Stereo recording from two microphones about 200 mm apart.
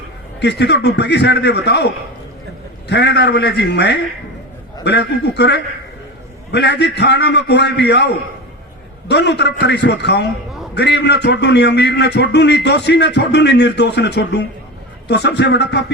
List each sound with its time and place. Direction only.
0.3 s a man's voice: 60° left (ahead or behind)
2.9 s a man's voice: 60° left (ahead or behind)